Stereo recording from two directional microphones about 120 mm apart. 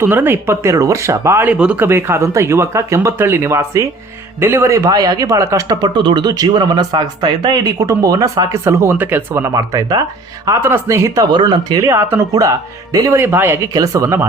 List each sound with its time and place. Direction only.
0.0 s speech: 15° right (ahead or behind)
5.8 s speech: 40° right (ahead or behind)